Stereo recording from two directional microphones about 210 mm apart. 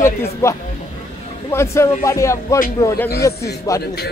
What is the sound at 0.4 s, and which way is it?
Speech, 15° left (ahead or behind).